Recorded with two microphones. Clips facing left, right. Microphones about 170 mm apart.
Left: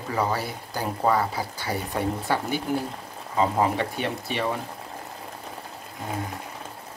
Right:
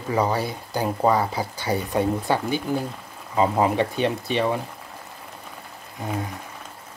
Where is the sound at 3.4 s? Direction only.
20° right (ahead or behind).